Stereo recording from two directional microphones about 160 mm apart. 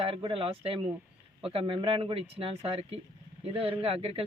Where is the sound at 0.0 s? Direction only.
35° right (ahead or behind).